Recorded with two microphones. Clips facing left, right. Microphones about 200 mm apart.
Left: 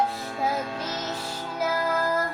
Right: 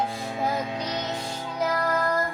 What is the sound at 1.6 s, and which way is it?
Music, 5° left (ahead or behind).